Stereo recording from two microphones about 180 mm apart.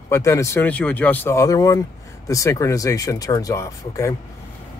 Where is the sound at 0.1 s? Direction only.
15° left (ahead or behind).